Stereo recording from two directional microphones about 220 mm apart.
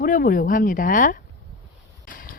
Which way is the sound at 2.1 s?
40° left (ahead or behind).